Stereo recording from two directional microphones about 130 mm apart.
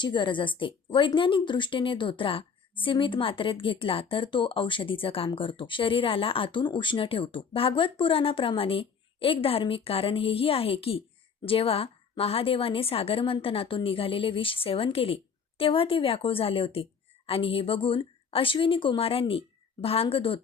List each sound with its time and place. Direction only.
0.0 s a woman's voice: 35° left (ahead or behind)